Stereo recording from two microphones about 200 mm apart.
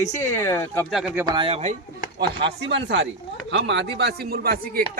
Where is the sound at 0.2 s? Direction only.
15° left (ahead or behind).